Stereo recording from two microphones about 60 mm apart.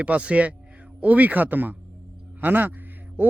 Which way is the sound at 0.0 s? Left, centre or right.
Right.